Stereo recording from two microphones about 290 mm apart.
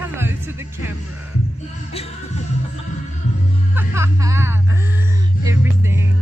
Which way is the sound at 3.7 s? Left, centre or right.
Centre.